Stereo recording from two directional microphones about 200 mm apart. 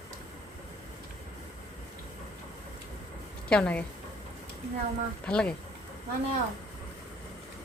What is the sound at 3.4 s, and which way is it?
Speech, 5° left (ahead or behind).